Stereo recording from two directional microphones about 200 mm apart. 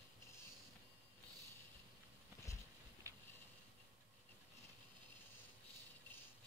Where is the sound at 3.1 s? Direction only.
15° right (ahead or behind).